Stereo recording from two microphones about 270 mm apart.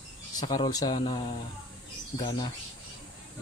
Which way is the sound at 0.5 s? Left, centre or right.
Centre.